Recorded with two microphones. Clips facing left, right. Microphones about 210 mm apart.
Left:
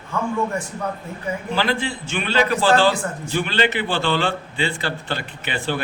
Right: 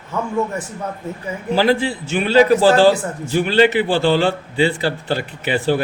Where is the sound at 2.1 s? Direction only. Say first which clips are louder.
Right 8 dB; 40° right (ahead or behind).